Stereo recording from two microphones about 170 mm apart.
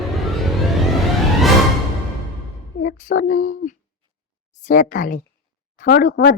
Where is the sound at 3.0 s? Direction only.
55° left (ahead or behind).